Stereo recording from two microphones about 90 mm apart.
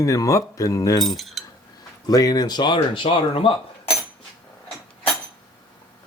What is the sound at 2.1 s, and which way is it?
Speech, 45° left (ahead or behind).